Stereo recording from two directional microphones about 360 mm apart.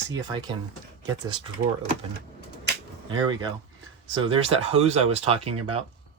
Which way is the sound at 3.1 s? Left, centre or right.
Centre.